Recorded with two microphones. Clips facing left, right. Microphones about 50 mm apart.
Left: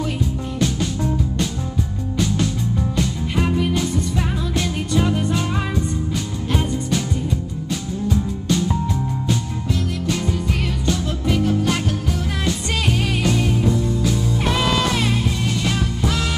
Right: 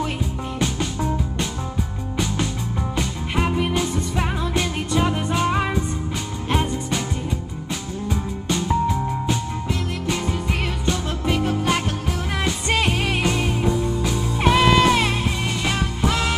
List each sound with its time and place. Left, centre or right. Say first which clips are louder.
2.1 s music: left 3 dB; centre
6.5 s music: even; centre
8.1 s music: left 4 dB; centre